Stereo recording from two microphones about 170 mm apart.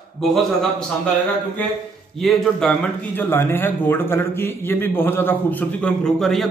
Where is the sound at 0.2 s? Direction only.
Centre (ahead or behind).